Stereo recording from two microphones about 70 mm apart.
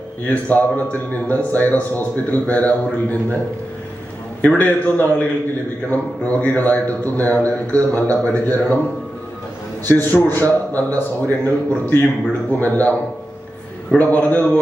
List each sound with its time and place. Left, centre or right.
0.3 s a man's voice: left
4.4 s a man's voice: left
9.8 s a man's voice: left
14.0 s a man's voice: left